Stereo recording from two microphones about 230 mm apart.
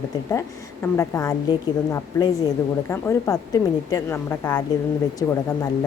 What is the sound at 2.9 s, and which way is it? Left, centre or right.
A woman's voice, centre.